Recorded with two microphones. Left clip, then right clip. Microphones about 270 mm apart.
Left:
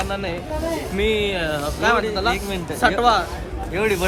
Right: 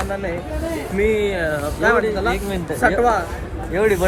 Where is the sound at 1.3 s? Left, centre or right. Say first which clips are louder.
Right 2 dB; centre.